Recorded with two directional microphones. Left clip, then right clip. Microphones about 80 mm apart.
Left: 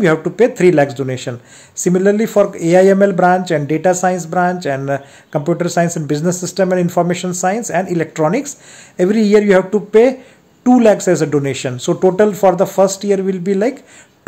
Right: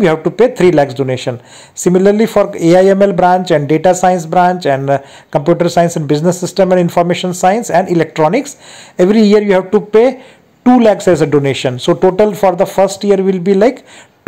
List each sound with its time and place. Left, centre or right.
0.0 s speech: right